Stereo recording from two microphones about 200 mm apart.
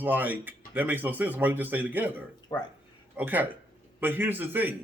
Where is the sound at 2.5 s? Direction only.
20° left (ahead or behind).